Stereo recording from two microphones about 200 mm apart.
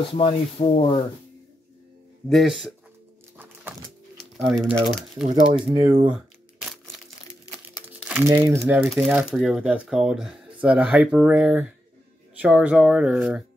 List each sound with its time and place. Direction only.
0.2 s speech: 30° left (ahead or behind)
2.2 s speech: centre (ahead or behind)
4.2 s speech: centre (ahead or behind)
5.7 s speech: 25° right (ahead or behind)
6.1 s shuffling cards: centre (ahead or behind)
8.0 s crumpling: 5° right (ahead or behind)
8.3 s speech: 15° right (ahead or behind)